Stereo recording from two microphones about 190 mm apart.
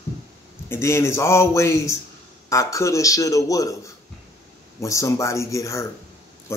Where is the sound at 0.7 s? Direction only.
15° left (ahead or behind).